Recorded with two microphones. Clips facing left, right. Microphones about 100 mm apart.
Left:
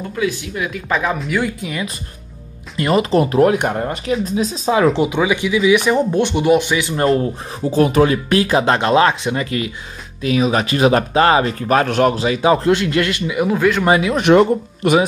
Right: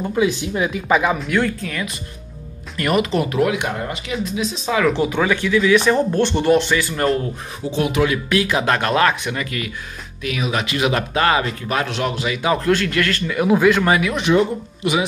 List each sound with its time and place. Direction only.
0.1 s speech: 20° right (ahead or behind)
0.8 s speech: 5° right (ahead or behind)
1.6 s speech: 15° left (ahead or behind)
2.8 s speech: 30° left (ahead or behind)
5.1 s speech: 15° left (ahead or behind)
7.7 s speech: 40° left (ahead or behind)
12.2 s speech: 30° left (ahead or behind)
13.5 s speech: 5° right (ahead or behind)
13.8 s speech: 25° left (ahead or behind)
14.4 s speech: 50° left (ahead or behind)